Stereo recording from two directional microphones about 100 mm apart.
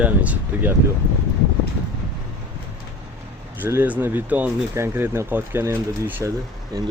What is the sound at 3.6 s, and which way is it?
Speech, 20° right (ahead or behind).